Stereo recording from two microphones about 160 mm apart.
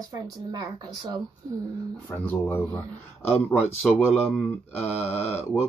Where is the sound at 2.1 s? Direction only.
10° left (ahead or behind).